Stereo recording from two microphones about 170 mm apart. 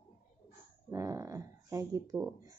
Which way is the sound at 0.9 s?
20° right (ahead or behind).